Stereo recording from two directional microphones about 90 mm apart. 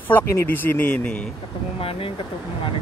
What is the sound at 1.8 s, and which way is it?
Speech, 90° left.